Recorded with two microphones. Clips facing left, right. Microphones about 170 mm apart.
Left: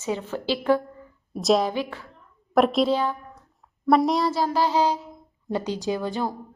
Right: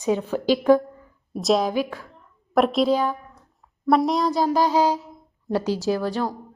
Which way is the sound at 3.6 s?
Centre (ahead or behind).